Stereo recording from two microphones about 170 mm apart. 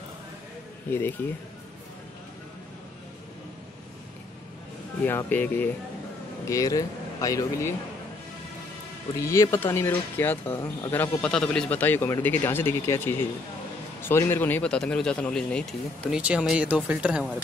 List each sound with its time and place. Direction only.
0.8 s speech: 15° left (ahead or behind)
5.0 s speech: 10° left (ahead or behind)
9.2 s speech: 15° left (ahead or behind); by 17.3 s 5° right (ahead or behind)